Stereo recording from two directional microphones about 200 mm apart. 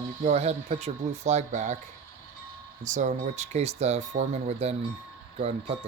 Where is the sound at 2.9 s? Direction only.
40° right (ahead or behind).